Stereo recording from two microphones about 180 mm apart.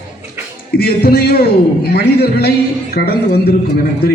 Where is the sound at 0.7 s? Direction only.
60° left (ahead or behind).